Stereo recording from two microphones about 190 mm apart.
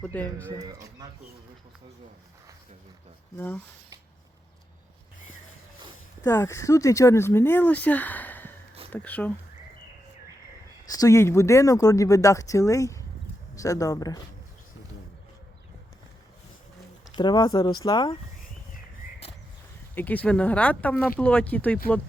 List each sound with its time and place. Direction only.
0.0 s speech: 10° left (ahead or behind)
0.6 s speech: 20° right (ahead or behind)
3.3 s speech: 10° left (ahead or behind)
6.2 s speech: 15° left (ahead or behind)
10.9 s speech: 15° left (ahead or behind)
17.2 s speech: 20° left (ahead or behind)
20.0 s speech: 10° left (ahead or behind)